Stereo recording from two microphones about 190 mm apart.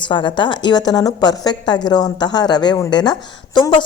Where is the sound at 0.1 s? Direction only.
25° left (ahead or behind).